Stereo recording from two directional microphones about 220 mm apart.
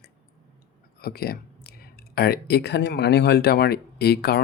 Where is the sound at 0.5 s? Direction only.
45° left (ahead or behind).